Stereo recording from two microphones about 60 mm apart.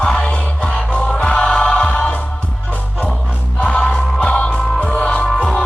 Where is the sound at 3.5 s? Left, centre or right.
Centre.